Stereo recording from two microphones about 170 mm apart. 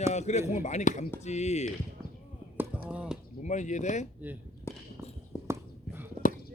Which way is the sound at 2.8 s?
5° right (ahead or behind).